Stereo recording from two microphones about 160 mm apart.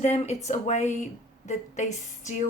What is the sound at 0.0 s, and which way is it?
Speech, 45° left (ahead or behind).